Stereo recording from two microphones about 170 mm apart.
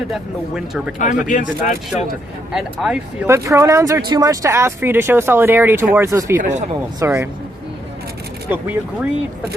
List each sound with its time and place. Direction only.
0.1 s speech: 5° right (ahead or behind)
1.6 s speech: 45° left (ahead or behind)
2.5 s speech: 5° right (ahead or behind)
6.3 s speech: 50° right (ahead or behind)
7.0 s speech: 15° right (ahead or behind)
8.4 s speech: 10° right (ahead or behind)